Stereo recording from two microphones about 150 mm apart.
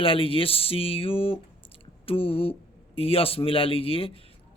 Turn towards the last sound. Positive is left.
turn(degrees=40)  # may be behind; listen again after turning